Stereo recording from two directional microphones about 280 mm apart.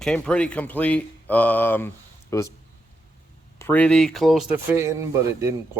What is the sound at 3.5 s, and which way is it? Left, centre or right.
Speech, centre.